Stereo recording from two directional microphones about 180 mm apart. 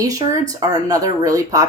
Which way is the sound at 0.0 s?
20° right (ahead or behind).